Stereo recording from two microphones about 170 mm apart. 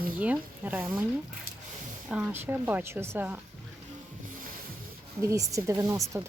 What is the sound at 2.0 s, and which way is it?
Speech, 10° right (ahead or behind).